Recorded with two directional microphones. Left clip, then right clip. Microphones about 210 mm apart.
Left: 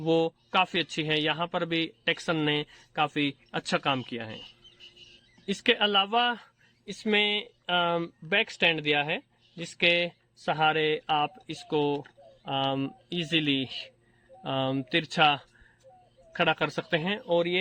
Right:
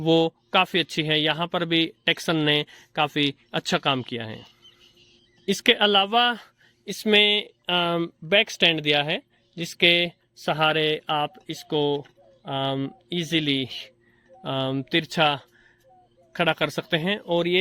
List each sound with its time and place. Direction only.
0.0 s speech: 40° right (ahead or behind)
5.5 s speech: 35° right (ahead or behind)